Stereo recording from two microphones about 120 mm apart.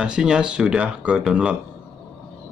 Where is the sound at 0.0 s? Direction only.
5° right (ahead or behind).